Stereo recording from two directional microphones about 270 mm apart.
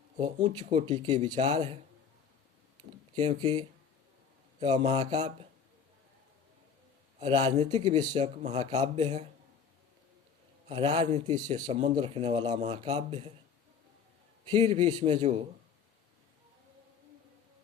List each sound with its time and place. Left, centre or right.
0.2 s speech: right
3.2 s speech: right
7.2 s speech: right
10.7 s speech: centre
14.5 s a man's voice: centre